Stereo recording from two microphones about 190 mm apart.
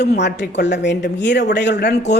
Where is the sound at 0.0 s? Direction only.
60° left (ahead or behind).